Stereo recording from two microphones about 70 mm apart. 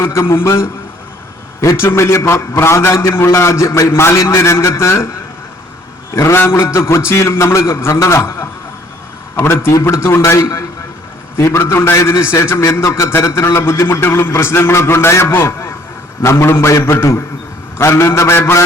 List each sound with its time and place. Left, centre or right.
0.0 s a man's voice: left
1.7 s a man's voice: left
6.1 s a man's voice: left